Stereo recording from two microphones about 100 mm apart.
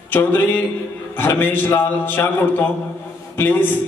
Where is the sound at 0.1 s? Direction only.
20° left (ahead or behind).